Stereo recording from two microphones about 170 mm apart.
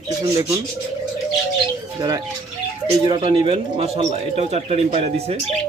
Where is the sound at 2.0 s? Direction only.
25° right (ahead or behind).